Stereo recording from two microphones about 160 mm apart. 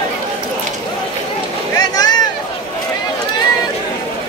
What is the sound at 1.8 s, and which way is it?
Boat, 25° left (ahead or behind).